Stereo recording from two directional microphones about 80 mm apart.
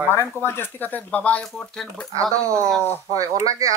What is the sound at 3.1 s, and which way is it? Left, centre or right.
Speech, right.